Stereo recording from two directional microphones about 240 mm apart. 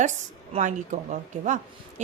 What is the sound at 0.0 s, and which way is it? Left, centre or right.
Speech, right.